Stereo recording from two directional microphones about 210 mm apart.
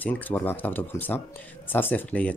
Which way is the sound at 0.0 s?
10° left (ahead or behind).